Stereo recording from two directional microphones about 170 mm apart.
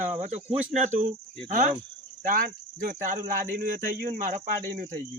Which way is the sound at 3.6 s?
60° right (ahead or behind).